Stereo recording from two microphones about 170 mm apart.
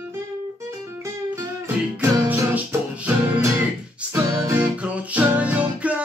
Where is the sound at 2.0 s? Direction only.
15° right (ahead or behind).